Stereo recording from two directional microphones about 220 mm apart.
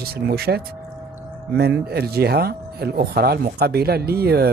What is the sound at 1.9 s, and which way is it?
Speech, 45° right (ahead or behind).